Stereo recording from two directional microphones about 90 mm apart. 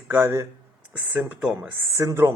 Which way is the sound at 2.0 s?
35° right (ahead or behind).